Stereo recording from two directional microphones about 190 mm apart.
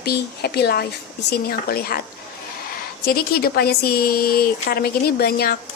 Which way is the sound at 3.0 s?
50° left (ahead or behind).